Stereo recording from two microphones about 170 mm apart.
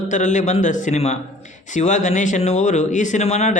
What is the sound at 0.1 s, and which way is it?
Speech, 45° left (ahead or behind).